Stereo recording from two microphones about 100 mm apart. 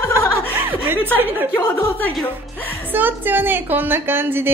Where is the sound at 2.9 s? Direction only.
20° right (ahead or behind).